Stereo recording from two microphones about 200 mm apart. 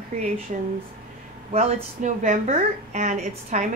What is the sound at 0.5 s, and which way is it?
A woman's voice, 35° right (ahead or behind).